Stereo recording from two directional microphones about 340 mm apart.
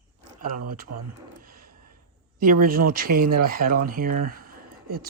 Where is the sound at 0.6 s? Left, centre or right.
Right.